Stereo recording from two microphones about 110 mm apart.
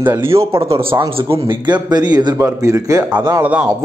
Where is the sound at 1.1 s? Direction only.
55° right (ahead or behind).